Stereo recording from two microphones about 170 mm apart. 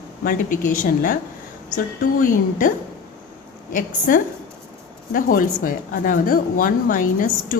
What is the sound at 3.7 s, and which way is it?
A woman's voice, 50° left (ahead or behind).